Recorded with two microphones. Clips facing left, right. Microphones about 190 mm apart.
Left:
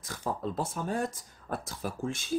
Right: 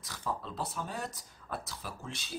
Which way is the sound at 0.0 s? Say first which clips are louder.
Left 5 dB; 50° left (ahead or behind).